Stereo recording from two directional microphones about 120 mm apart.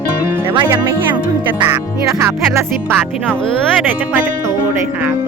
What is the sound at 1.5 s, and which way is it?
Speech, 15° right (ahead or behind).